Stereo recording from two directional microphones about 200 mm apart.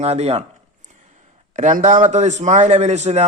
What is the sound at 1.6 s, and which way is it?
Speech, 40° right (ahead or behind).